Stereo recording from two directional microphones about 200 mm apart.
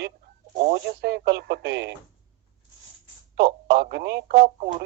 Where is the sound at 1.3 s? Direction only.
55° right (ahead or behind).